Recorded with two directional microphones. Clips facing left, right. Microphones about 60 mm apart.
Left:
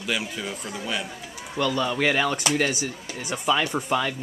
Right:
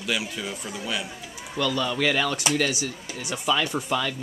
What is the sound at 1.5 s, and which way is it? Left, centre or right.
Speech, left.